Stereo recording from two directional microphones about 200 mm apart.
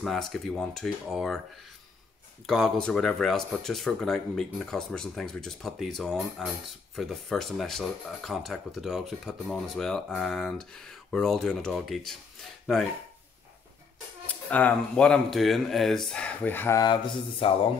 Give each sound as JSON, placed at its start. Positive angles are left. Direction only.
{"t": 0.0, "sound": "speech", "side_deg": 0}
{"t": 2.4, "sound": "speech", "side_deg": 0}
{"t": 14.2, "sound": "speech", "side_deg": 5}